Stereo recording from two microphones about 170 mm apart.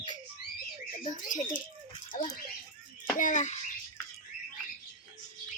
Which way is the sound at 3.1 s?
50° left (ahead or behind).